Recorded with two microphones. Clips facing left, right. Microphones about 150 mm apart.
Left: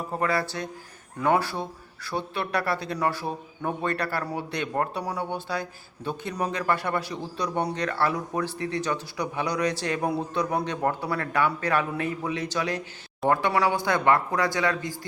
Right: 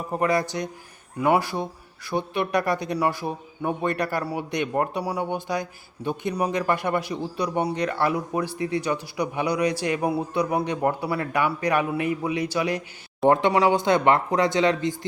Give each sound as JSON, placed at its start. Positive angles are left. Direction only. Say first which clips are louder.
{"t": 0.1, "sound": "speech", "louder": "right 4 dB", "side_deg": -15}
{"t": 13.2, "sound": "speech", "louder": "right 4 dB", "side_deg": -20}